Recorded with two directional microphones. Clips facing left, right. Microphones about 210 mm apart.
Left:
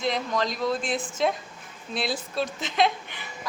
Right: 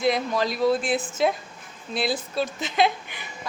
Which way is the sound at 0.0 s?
10° right (ahead or behind).